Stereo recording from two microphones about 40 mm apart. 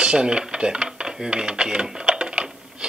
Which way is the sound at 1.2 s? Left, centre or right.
Right.